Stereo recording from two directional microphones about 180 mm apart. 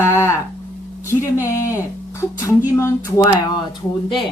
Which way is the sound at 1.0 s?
15° left (ahead or behind).